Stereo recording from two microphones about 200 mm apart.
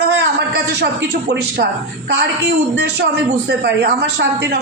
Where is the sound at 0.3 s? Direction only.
55° right (ahead or behind).